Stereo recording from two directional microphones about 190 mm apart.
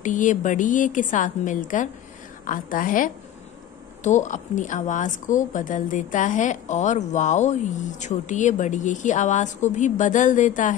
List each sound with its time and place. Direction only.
0.0 s a woman's voice: 40° left (ahead or behind)